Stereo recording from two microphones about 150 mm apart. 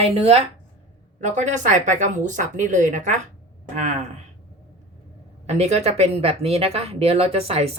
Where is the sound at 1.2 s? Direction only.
50° right (ahead or behind).